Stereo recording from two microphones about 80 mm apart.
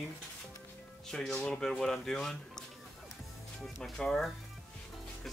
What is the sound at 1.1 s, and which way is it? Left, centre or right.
Speech, centre.